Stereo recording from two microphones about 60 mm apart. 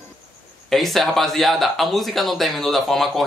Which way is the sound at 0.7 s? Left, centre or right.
Centre.